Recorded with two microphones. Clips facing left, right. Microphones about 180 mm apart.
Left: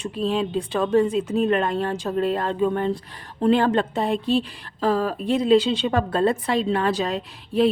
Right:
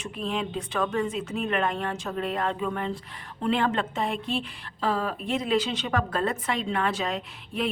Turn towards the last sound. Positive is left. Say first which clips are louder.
# left 10 dB
turn(degrees=35)  # may be behind; listen again after turning